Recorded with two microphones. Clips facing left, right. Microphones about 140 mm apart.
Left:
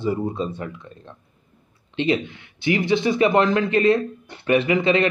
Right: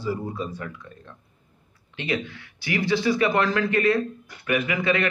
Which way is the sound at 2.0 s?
20° left (ahead or behind).